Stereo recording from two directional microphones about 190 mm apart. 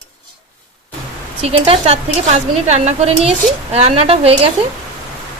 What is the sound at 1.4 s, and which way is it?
Speech, 30° right (ahead or behind).